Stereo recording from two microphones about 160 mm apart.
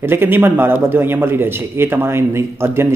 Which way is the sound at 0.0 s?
15° right (ahead or behind).